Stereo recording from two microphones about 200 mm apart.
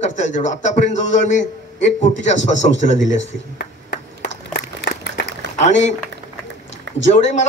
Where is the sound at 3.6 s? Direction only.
60° left (ahead or behind).